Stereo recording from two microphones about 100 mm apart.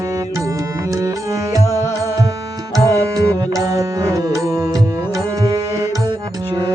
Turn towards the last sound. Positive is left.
turn(degrees=-35)  # may be behind; listen again after turning